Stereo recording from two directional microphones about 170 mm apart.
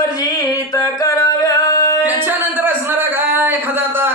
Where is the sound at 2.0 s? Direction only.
10° right (ahead or behind).